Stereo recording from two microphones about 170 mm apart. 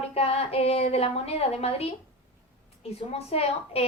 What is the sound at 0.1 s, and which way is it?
A woman's voice, 35° left (ahead or behind).